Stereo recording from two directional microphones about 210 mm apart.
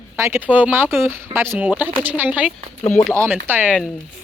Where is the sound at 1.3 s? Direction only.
10° right (ahead or behind).